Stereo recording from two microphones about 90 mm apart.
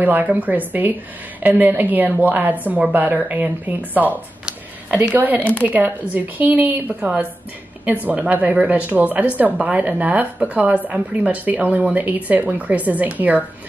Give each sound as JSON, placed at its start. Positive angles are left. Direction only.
{"t": 0.0, "sound": "a woman's voice", "side_deg": -20}